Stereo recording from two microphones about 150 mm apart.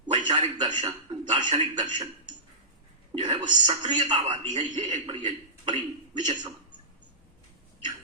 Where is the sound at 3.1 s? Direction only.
30° right (ahead or behind).